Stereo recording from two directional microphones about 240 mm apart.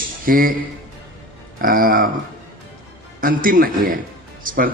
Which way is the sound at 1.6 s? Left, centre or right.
Right.